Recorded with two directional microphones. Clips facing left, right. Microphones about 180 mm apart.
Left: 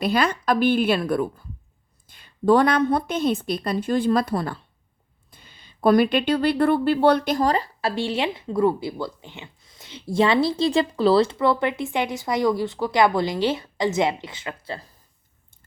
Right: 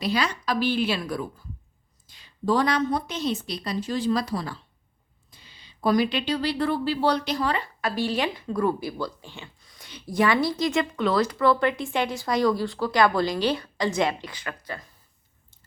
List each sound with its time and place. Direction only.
0.0 s a woman's voice: 55° left (ahead or behind); by 14.8 s 30° left (ahead or behind)